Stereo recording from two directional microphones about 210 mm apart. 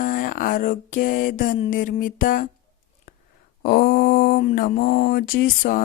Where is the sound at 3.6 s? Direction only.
45° left (ahead or behind).